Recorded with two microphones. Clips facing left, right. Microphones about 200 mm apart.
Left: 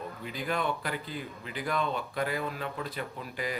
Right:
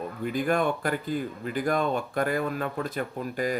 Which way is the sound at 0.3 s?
50° right (ahead or behind).